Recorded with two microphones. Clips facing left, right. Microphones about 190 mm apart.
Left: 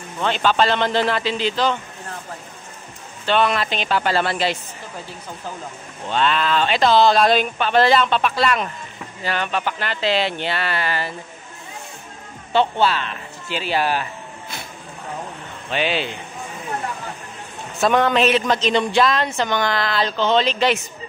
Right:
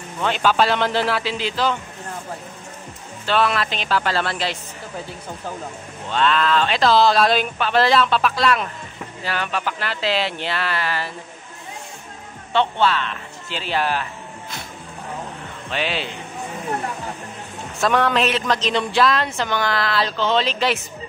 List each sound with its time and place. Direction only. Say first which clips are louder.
0.2 s a man's voice: even; 5° right (ahead or behind)
3.3 s a woman's voice: left 1 dB; centre (ahead or behind)
6.1 s a woman's voice: right 1 dB; centre (ahead or behind)
12.5 s a woman's voice: left 1 dB; 5° left (ahead or behind)
15.7 s a woman's voice: left 3 dB; centre (ahead or behind)
17.7 s a woman's voice: left 2 dB; centre (ahead or behind)